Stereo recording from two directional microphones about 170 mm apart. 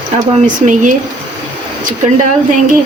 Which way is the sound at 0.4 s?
50° right (ahead or behind).